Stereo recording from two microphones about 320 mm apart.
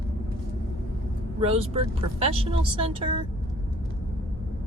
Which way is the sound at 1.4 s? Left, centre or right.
Centre.